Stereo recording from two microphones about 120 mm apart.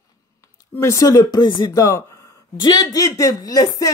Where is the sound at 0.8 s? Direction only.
25° left (ahead or behind).